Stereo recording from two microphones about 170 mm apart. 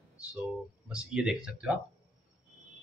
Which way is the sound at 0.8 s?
5° right (ahead or behind).